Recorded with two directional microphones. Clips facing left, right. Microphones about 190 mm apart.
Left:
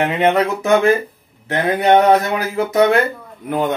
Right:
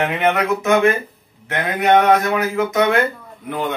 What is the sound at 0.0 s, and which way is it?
Speech, 30° left (ahead or behind).